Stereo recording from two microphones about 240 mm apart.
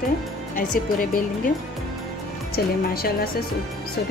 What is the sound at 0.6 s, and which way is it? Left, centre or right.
Speech, left.